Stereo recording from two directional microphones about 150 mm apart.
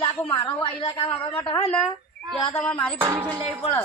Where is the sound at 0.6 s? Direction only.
40° left (ahead or behind).